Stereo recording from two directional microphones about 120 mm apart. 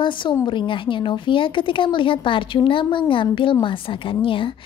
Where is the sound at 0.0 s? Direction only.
40° left (ahead or behind).